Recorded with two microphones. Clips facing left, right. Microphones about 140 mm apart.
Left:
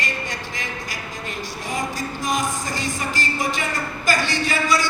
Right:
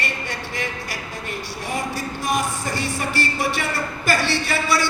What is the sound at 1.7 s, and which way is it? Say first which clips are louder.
Music: even; 60° right (ahead or behind).